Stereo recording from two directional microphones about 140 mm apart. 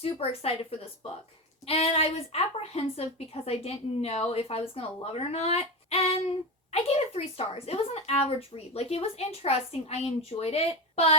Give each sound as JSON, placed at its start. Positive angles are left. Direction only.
{"t": 0.0, "sound": "speech", "side_deg": 45}
{"t": 1.6, "sound": "speech", "side_deg": 45}